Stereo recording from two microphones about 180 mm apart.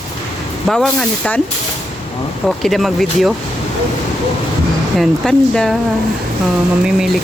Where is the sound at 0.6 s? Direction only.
5° left (ahead or behind).